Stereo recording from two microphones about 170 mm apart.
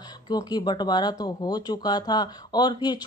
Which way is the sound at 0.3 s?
25° left (ahead or behind).